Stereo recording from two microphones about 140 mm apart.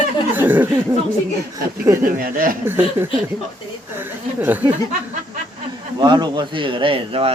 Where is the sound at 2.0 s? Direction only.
80° right.